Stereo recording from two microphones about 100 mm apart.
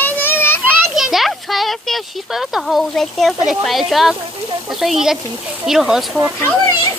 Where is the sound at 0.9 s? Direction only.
5° right (ahead or behind).